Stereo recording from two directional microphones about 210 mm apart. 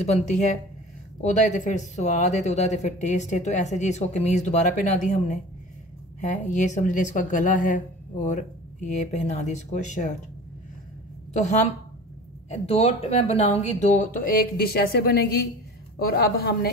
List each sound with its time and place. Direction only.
0.0 s speech: 30° left (ahead or behind)
12.4 s speech: 30° left (ahead or behind); by 16.7 s 50° left (ahead or behind)